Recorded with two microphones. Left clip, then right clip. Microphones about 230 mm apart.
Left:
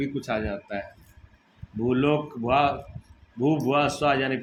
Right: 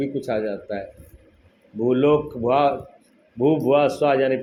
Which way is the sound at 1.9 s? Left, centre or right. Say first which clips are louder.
Right 6 dB; centre.